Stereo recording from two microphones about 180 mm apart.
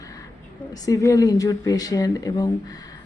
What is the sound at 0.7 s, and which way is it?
Speech, 20° left (ahead or behind).